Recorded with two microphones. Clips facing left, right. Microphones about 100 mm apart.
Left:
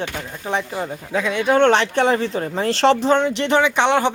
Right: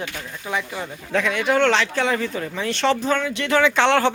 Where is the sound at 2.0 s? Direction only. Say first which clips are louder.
Left 4 dB; 30° left (ahead or behind).